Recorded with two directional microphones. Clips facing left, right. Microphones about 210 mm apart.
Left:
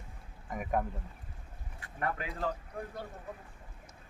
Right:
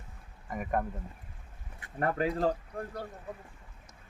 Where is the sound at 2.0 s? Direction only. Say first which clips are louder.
Right 7 dB; 40° right (ahead or behind).